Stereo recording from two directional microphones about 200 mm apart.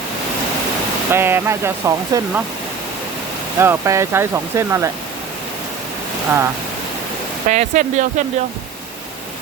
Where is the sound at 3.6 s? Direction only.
15° right (ahead or behind).